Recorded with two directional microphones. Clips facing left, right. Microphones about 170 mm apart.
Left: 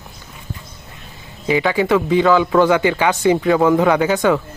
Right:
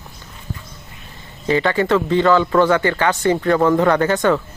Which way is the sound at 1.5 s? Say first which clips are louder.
Left 1 dB; 10° left (ahead or behind).